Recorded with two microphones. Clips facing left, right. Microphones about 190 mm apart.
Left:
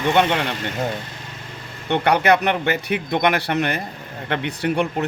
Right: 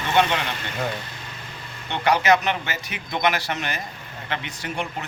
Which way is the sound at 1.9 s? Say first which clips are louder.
Left 3 dB; 60° left (ahead or behind).